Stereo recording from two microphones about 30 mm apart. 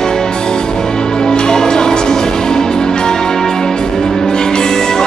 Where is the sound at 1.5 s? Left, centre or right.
Left.